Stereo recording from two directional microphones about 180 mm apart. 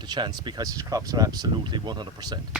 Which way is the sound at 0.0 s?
25° right (ahead or behind).